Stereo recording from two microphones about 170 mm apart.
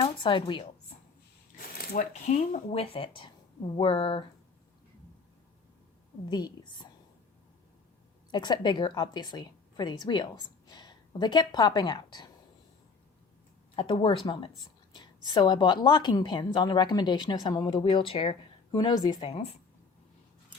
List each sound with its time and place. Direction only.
0.0 s a woman's voice: 30° left (ahead or behind)
1.5 s a sound: 60° left (ahead or behind)
2.1 s a woman's voice: 45° left (ahead or behind)
6.3 s a woman's voice: 25° left (ahead or behind)
8.3 s a woman's voice: 25° left (ahead or behind)
13.7 s a woman's voice: 30° left (ahead or behind)